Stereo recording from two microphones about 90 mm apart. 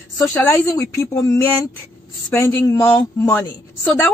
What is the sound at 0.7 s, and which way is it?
A woman's voice, 35° left (ahead or behind).